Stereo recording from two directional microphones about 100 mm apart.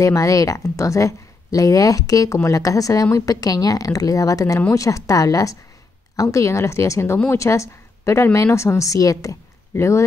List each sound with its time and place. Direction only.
0.0 s a woman's voice: 30° left (ahead or behind)